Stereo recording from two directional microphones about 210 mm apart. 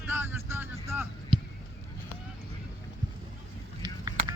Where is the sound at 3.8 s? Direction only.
20° right (ahead or behind).